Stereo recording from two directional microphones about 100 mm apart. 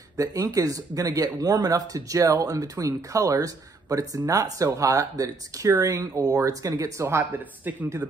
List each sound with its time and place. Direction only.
0.2 s speech: 35° right (ahead or behind)